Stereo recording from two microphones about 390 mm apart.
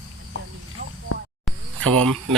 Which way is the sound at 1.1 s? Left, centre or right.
Left.